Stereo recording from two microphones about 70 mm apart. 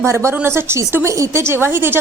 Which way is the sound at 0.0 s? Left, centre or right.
Right.